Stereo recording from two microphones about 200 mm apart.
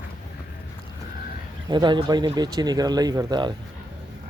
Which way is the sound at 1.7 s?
20° right (ahead or behind).